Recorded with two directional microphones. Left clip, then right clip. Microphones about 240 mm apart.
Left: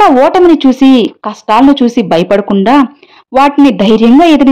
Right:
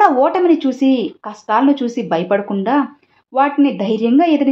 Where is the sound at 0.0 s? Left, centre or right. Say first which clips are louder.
Left 7 dB; left.